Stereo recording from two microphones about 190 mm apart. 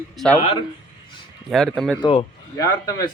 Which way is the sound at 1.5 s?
Centre (ahead or behind).